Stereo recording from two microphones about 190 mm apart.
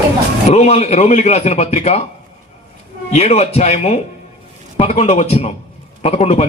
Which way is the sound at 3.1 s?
35° left (ahead or behind).